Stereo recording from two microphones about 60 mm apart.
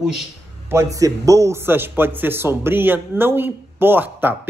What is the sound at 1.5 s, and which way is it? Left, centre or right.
A man's voice, right.